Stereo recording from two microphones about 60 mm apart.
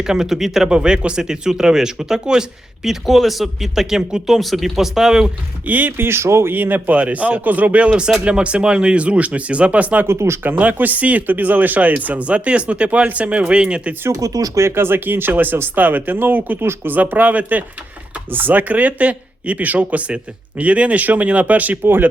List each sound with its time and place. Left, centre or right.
0.0 s speech: centre
5.6 s a man's voice: right
6.1 s speech: right
6.5 s a man's voice: right
10.1 s speech: right
10.4 s a man's voice: right
14.1 s speech: right
14.6 s a man's voice: right